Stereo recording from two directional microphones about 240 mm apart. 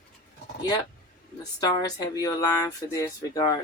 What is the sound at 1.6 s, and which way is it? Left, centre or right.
Speech, centre.